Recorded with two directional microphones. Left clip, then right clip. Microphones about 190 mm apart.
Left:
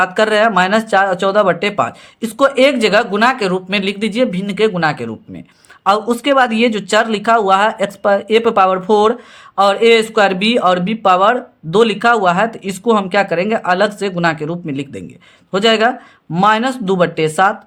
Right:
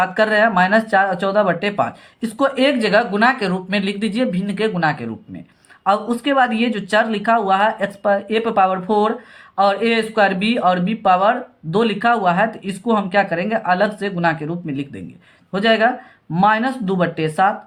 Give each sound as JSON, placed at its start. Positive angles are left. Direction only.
{"t": 0.0, "sound": "a man's voice", "side_deg": 35}